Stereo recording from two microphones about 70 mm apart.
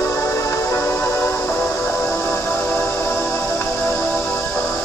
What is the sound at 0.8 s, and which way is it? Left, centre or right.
Music, left.